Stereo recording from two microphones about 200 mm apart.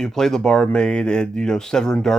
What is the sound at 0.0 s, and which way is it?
Speech, 5° left (ahead or behind).